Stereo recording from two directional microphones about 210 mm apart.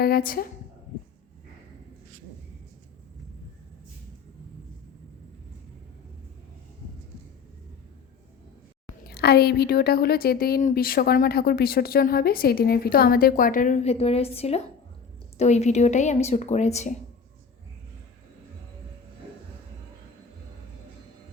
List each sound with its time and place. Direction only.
0.0 s a woman's voice: 45° left (ahead or behind)
9.0 s a woman's voice: 50° left (ahead or behind); by 16.9 s 35° left (ahead or behind)